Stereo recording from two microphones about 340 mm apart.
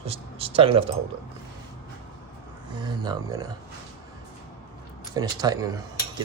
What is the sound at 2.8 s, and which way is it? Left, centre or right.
Speech, centre.